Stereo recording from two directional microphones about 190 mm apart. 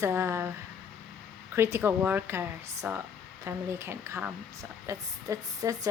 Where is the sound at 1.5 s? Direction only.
15° right (ahead or behind).